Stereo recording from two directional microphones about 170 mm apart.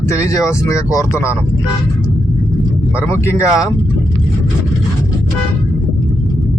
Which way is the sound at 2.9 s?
15° left (ahead or behind).